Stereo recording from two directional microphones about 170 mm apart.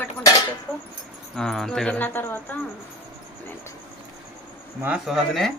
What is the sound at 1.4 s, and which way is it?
Speech, 5° left (ahead or behind).